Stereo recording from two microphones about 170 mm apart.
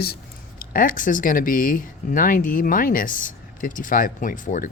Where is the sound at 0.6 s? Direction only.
55° left (ahead or behind).